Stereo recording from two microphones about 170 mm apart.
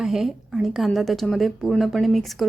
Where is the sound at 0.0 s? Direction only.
Centre (ahead or behind).